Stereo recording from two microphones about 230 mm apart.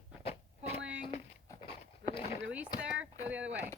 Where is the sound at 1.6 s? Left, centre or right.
Left.